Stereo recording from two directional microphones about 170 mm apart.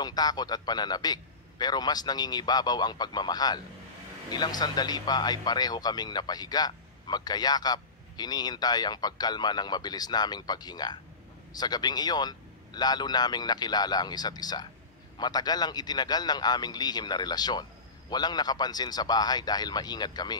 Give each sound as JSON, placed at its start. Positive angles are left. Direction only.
{"t": 0.0, "sound": "speech", "side_deg": 25}